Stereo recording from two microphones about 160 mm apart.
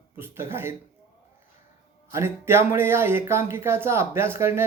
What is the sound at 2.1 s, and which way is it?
A man's voice, 15° right (ahead or behind).